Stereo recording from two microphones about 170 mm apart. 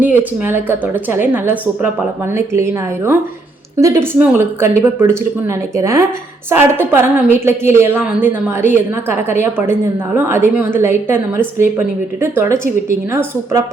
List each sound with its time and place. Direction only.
0.0 s a woman's voice: 10° right (ahead or behind)